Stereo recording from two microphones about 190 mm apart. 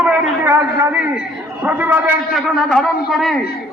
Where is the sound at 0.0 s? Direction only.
10° right (ahead or behind).